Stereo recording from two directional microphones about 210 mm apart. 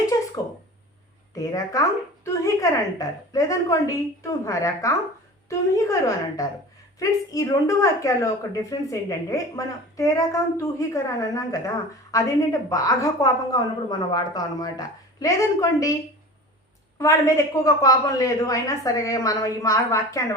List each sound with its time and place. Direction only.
1.3 s a woman's voice: 15° left (ahead or behind)
17.0 s a woman's voice: 15° left (ahead or behind)